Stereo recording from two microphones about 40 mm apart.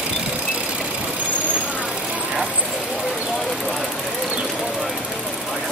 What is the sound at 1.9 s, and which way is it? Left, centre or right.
Vehicle, centre.